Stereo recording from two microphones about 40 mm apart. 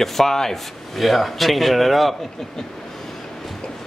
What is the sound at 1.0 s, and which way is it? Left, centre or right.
A man's voice, centre.